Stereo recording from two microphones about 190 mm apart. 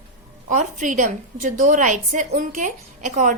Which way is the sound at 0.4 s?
40° right (ahead or behind).